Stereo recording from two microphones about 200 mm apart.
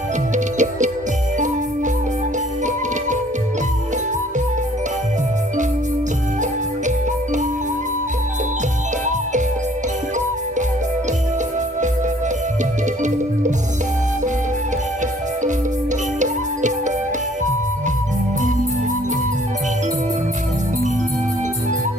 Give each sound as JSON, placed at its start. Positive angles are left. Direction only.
{"t": 0.3, "sound": "music", "side_deg": -35}